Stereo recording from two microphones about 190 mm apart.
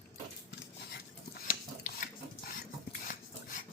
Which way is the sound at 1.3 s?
50° left (ahead or behind).